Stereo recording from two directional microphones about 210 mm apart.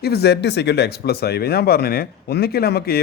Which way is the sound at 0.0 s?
50° left (ahead or behind).